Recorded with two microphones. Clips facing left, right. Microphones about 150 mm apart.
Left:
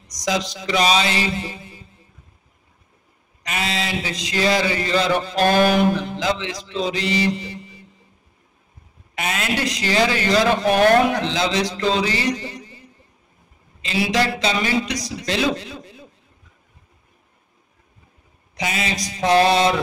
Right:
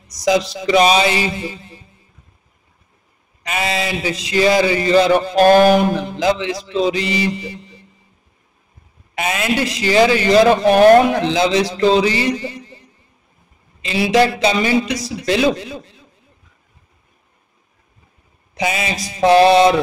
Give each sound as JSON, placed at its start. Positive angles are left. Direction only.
{"t": 0.1, "sound": "a man's voice", "side_deg": -5}
{"t": 3.5, "sound": "a man's voice", "side_deg": -5}
{"t": 5.3, "sound": "speech", "side_deg": -45}
{"t": 6.1, "sound": "a man's voice", "side_deg": -5}
{"t": 9.2, "sound": "a man's voice", "side_deg": -5}
{"t": 13.7, "sound": "a man's voice", "side_deg": 0}
{"t": 18.5, "sound": "mantra", "side_deg": -5}